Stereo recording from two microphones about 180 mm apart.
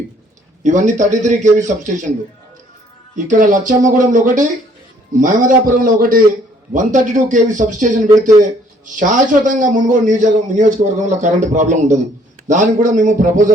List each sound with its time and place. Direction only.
0.6 s a man's voice: 45° right (ahead or behind)
3.2 s a man's voice: 45° right (ahead or behind)